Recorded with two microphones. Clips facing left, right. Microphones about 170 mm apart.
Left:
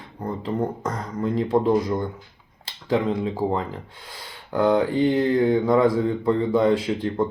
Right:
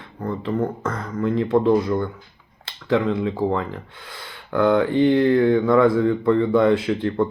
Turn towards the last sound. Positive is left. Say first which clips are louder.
# right 2 dB
turn(degrees=10)  # may be behind; listen again after turning